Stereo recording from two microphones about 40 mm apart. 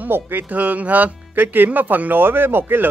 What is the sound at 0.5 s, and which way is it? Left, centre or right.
Speech, right.